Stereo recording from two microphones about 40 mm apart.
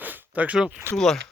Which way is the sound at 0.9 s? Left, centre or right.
Centre.